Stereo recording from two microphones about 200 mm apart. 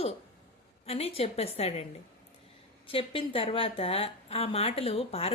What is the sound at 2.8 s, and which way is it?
Speech, 25° left (ahead or behind).